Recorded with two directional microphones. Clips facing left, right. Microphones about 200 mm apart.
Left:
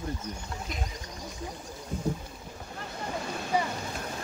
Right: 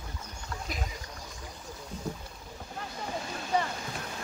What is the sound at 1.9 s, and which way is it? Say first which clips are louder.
Rowboat: left 6 dB; 50° left (ahead or behind).